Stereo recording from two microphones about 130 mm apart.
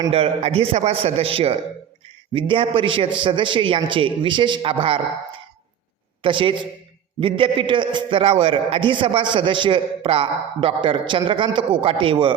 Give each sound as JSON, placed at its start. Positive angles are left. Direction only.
{"t": 0.1, "sound": "a man's voice", "side_deg": -50}
{"t": 6.2, "sound": "a man's voice", "side_deg": -40}